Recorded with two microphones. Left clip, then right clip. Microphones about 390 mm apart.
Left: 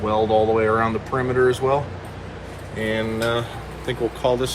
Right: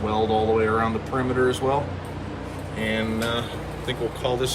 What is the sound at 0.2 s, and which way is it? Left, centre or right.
Speech, left.